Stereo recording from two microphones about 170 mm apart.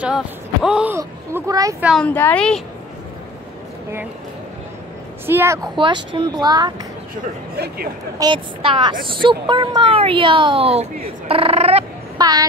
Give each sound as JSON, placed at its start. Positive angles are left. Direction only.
{"t": 0.0, "sound": "speech", "side_deg": -5}
{"t": 0.9, "sound": "speech", "side_deg": -20}
{"t": 1.8, "sound": "speech", "side_deg": -5}
{"t": 2.0, "sound": "speech", "side_deg": 10}
{"t": 5.2, "sound": "a woman's voice", "side_deg": -15}
{"t": 5.8, "sound": "speech", "side_deg": -30}
{"t": 7.5, "sound": "speech", "side_deg": -65}
{"t": 8.2, "sound": "speech", "side_deg": -30}
{"t": 12.2, "sound": "speech", "side_deg": -20}